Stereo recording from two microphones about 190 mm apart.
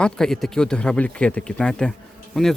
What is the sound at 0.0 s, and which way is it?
Speech, 5° left (ahead or behind).